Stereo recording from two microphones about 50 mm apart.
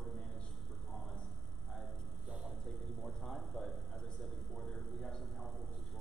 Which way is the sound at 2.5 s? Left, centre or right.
Centre.